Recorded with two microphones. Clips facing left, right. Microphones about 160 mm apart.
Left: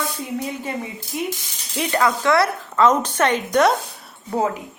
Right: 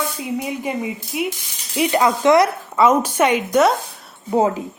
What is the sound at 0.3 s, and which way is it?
Speech, 15° right (ahead or behind).